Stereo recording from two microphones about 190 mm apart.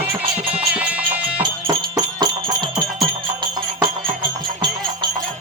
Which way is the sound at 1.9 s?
20° right (ahead or behind).